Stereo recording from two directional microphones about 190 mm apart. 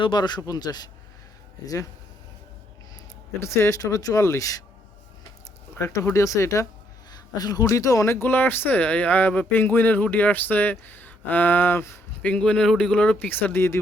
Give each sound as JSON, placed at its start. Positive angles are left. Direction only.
{"t": 0.0, "sound": "speech", "side_deg": 25}
{"t": 3.4, "sound": "speech", "side_deg": 15}
{"t": 5.8, "sound": "speech", "side_deg": 15}